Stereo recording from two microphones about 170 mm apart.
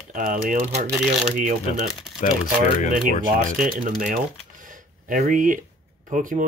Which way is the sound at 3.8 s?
50° right (ahead or behind).